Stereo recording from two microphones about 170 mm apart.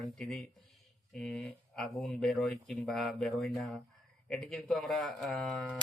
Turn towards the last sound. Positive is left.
turn(degrees=0)  # may be behind; listen again after turning